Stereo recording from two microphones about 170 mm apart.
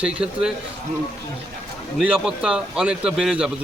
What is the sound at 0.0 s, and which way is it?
Speech, 5° right (ahead or behind).